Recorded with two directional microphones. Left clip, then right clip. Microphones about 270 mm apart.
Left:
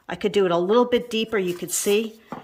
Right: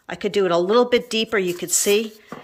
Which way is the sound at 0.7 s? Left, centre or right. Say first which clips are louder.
Right 2 dB; centre.